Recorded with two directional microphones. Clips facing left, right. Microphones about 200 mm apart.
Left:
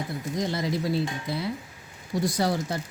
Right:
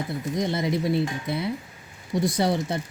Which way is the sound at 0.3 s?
20° right (ahead or behind).